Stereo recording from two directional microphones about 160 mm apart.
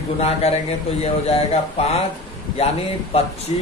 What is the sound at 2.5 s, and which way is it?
Speech, 40° left (ahead or behind).